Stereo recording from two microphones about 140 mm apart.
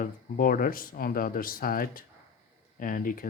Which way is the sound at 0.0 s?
80° left.